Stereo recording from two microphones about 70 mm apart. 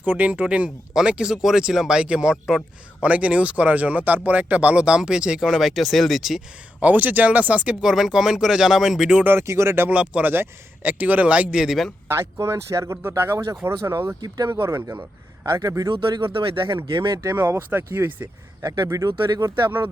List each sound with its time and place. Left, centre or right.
0.0 s speech: right; by 6.4 s centre
6.7 s speech: right
7.8 s speech: centre
9.2 s speech: right
9.9 s speech: centre
10.3 s speech: right; by 11.8 s centre
12.0 s speech: right
13.0 s speech: right
14.2 s speech: right
14.5 s a man's voice: right
16.6 s speech: right
17.3 s speech: right
18.9 s a man's voice: right